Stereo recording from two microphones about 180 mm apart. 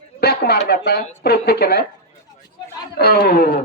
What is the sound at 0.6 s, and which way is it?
Speech, 60° left (ahead or behind).